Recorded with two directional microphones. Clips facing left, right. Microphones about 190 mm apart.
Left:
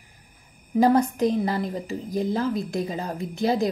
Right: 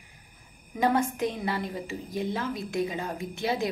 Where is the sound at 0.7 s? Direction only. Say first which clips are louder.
Left 6 dB; 35° left (ahead or behind).